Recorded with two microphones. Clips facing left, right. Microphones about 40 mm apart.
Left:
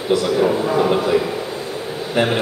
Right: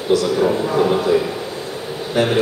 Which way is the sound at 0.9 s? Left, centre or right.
Left.